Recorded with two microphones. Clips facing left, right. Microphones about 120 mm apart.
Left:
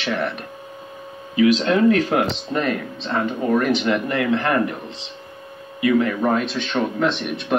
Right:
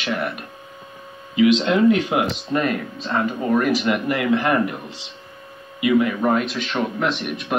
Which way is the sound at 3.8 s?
30° left (ahead or behind).